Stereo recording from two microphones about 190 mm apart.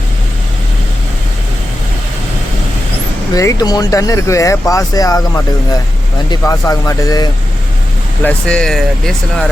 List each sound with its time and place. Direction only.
3.3 s speech: 20° left (ahead or behind)
8.2 s speech: 5° left (ahead or behind)